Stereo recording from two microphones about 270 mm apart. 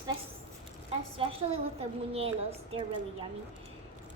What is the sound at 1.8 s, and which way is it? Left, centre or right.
Speech, right.